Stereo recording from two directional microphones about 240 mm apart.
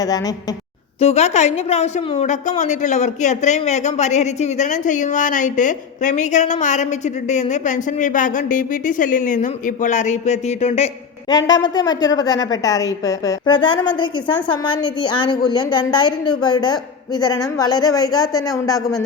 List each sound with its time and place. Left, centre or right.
0.9 s a woman's voice: left
11.3 s a woman's voice: centre